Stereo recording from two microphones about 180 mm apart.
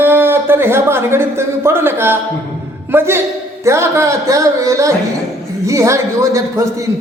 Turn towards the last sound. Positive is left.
turn(degrees=-15)  # may be behind; listen again after turning